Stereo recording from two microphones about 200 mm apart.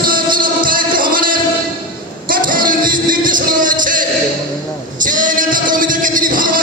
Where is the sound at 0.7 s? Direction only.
45° right (ahead or behind).